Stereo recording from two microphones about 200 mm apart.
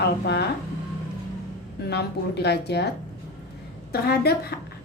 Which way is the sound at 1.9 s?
55° left (ahead or behind).